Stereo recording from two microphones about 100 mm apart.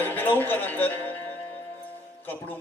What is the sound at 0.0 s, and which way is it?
Music, 20° left (ahead or behind).